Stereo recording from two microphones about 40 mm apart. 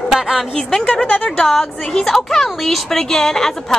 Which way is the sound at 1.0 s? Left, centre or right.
Left.